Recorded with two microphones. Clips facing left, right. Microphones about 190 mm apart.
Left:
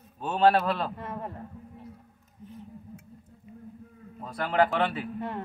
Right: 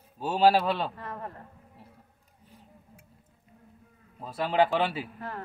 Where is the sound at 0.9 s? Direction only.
25° left (ahead or behind).